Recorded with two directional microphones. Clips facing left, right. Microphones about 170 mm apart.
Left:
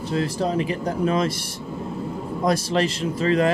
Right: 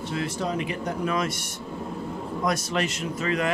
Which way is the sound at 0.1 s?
35° left (ahead or behind).